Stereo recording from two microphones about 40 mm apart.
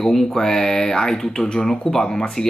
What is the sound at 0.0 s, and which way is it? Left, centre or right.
Speech, centre.